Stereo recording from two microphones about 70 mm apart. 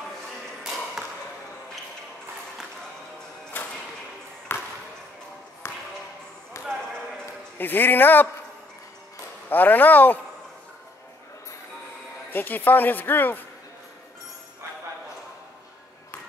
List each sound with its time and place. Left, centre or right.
1.0 s arrow: centre
4.5 s basketball bounce: left
5.6 s a sound: left
6.5 s basketball bounce: left
7.5 s speech: left
9.5 s speech: left
12.3 s speech: left